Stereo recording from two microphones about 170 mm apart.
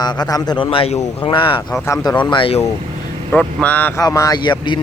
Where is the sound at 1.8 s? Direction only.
15° left (ahead or behind); by 2.6 s 35° left (ahead or behind).